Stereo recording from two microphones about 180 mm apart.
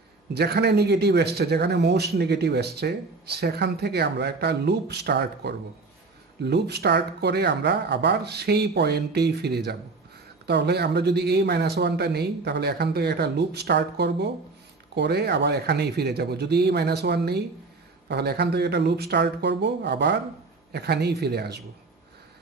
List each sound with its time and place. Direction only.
0.3 s speech: 65° right (ahead or behind)